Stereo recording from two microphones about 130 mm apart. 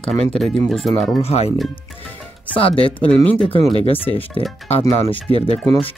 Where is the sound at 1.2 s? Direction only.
50° left (ahead or behind).